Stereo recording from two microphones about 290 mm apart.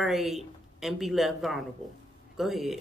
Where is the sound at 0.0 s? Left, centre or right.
Centre.